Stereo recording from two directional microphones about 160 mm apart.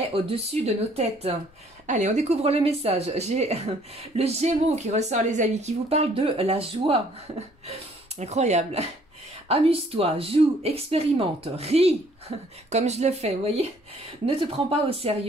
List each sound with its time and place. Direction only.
0.1 s speech: 40° right (ahead or behind)